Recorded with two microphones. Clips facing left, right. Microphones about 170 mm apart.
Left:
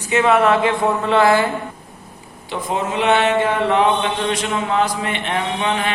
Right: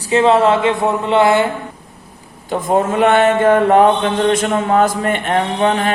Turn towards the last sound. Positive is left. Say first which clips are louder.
# right 5 dB
turn(degrees=-45)  # may be behind; listen again after turning